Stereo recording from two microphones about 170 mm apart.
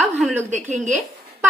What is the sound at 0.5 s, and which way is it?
Speech, 45° right (ahead or behind).